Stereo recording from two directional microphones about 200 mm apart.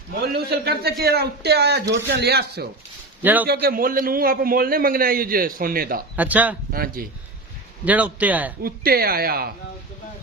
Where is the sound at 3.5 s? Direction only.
50° right (ahead or behind).